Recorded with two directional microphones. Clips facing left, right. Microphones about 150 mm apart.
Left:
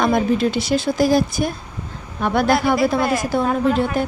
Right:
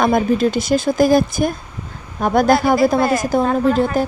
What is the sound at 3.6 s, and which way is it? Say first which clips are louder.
Speech: right 3 dB; 40° right (ahead or behind).